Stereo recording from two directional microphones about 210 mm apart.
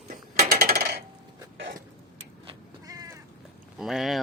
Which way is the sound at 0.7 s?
45° right (ahead or behind).